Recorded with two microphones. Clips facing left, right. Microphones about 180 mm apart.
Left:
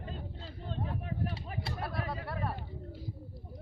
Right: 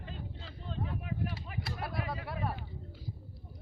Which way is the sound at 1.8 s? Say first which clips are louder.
Even; centre (ahead or behind).